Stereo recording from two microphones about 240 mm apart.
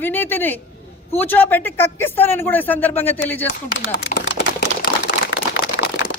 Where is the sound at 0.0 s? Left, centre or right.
Centre.